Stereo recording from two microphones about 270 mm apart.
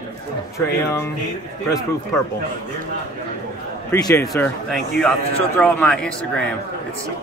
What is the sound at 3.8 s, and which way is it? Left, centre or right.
Speech, centre.